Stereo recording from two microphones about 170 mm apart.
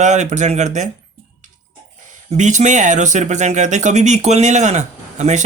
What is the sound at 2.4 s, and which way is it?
Speech, 45° right (ahead or behind).